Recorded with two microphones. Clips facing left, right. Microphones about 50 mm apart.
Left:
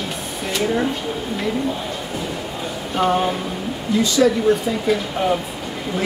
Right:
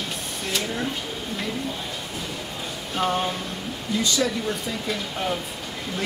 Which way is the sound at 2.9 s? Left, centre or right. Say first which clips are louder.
Left 6 dB; centre.